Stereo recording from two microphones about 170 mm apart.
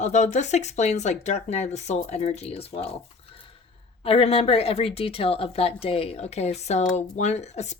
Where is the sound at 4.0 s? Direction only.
35° left (ahead or behind).